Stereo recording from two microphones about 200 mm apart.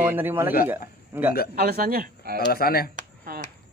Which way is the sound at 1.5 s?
50° right (ahead or behind).